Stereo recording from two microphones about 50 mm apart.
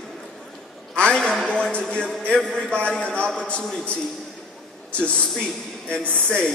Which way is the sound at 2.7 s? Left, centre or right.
Centre.